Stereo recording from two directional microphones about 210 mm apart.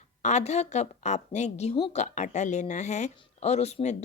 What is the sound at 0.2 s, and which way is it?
A woman's voice, 35° left (ahead or behind).